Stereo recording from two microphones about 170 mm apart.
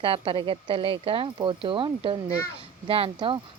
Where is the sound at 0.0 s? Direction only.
30° right (ahead or behind).